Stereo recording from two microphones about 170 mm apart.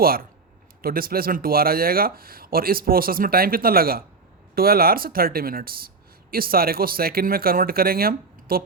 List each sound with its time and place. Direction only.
0.0 s speech: 60° right (ahead or behind)